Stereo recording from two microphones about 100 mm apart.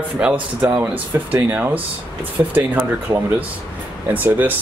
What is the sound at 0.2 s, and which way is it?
Speech, 20° right (ahead or behind).